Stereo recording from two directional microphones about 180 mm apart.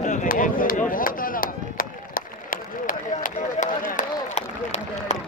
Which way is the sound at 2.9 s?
45° left (ahead or behind).